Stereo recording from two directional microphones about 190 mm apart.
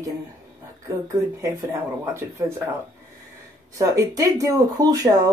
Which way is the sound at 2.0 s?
15° right (ahead or behind).